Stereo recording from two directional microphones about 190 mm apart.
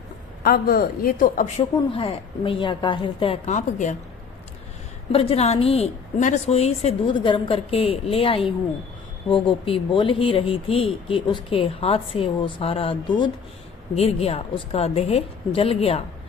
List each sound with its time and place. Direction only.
0.4 s speech: 50° left (ahead or behind)
1.9 s speech: 30° left (ahead or behind)
5.1 s a woman's voice: 30° left (ahead or behind)